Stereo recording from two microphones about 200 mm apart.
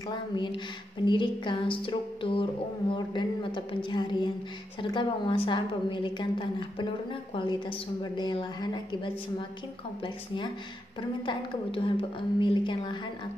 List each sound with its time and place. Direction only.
1.0 s a woman's voice: 20° left (ahead or behind)